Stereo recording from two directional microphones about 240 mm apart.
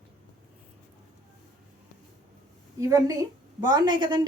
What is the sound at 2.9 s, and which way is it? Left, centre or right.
A woman's voice, centre.